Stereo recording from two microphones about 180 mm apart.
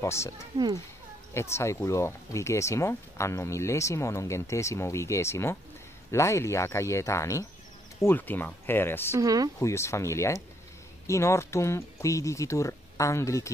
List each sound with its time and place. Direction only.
0.0 s speech: 15° left (ahead or behind)
0.5 s speech: 20° right (ahead or behind)
1.3 s speech: 15° left (ahead or behind)
9.1 s speech: 20° right (ahead or behind)
9.6 s speech: 15° left (ahead or behind)